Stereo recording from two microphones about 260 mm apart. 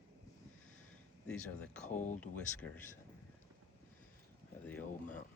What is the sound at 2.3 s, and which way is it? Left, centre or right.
Speech, centre.